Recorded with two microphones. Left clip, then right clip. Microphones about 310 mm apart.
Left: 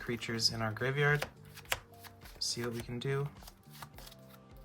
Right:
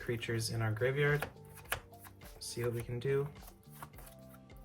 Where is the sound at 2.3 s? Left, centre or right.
Centre.